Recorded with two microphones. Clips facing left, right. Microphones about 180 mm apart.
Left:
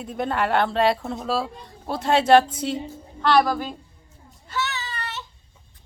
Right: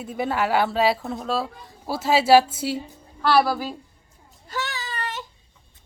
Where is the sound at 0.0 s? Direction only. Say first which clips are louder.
Even; 5° right (ahead or behind).